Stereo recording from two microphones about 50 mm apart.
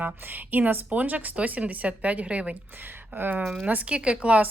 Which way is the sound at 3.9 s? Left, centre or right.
Right.